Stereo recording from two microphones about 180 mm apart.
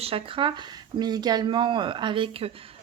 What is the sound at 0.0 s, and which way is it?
Speech, 30° right (ahead or behind).